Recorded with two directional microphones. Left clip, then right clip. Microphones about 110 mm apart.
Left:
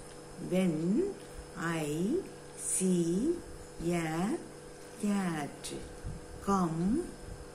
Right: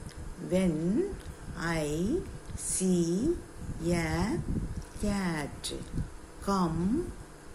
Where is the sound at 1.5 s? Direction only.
30° right (ahead or behind).